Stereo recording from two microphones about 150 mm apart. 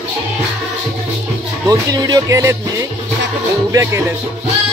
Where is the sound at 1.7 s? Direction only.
25° right (ahead or behind).